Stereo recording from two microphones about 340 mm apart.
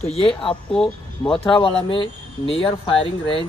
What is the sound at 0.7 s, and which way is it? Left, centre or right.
Speech, centre.